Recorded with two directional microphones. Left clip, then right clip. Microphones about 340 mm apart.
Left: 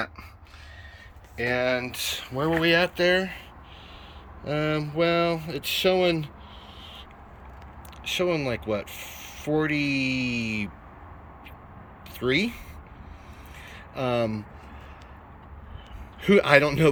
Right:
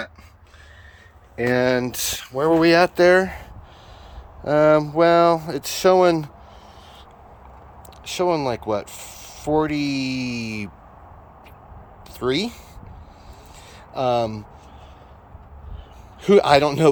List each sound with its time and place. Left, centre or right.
1.4 s speech: centre
4.4 s speech: centre
8.1 s speech: centre
12.2 s speech: centre
13.9 s speech: centre
16.2 s speech: centre